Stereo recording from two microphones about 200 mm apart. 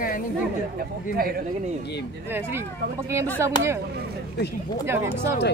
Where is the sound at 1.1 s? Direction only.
50° right (ahead or behind).